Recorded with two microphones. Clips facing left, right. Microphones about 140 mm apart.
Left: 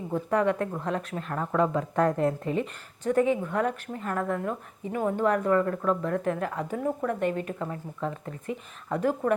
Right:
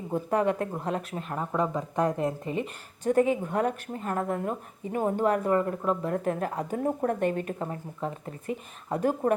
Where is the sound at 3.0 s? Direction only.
30° right (ahead or behind).